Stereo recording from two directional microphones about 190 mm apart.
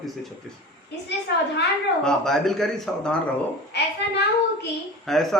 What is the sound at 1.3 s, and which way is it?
Speech, 60° left (ahead or behind).